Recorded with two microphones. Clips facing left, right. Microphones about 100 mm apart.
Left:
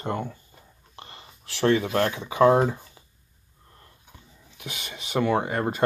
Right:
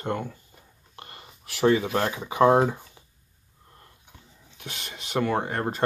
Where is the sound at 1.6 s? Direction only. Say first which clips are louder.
Even; 10° right (ahead or behind).